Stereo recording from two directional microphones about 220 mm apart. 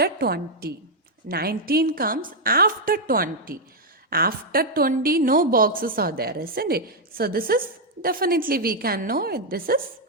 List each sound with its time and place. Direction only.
0.0 s a woman's voice: 45° right (ahead or behind)